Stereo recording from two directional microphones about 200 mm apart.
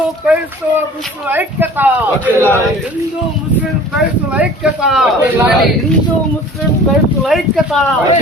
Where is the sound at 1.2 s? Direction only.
10° right (ahead or behind).